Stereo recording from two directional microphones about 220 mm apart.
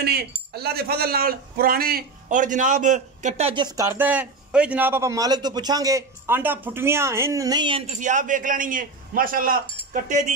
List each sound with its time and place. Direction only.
0.5 s a man's voice: 45° right (ahead or behind)